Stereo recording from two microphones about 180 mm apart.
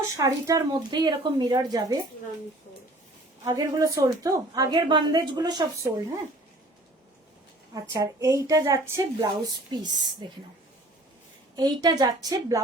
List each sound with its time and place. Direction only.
0.2 s a woman's voice: 20° right (ahead or behind)
3.4 s a woman's voice: 20° right (ahead or behind)
7.7 s a woman's voice: 20° right (ahead or behind)
11.5 s a woman's voice: 20° right (ahead or behind)